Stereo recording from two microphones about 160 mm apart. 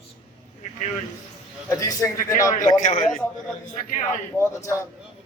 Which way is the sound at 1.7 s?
20° left (ahead or behind).